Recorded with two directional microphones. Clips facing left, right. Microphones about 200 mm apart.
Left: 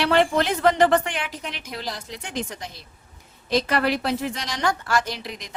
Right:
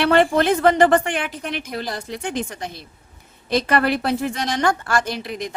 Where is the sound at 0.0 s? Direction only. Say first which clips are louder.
Right 4 dB; 55° right (ahead or behind).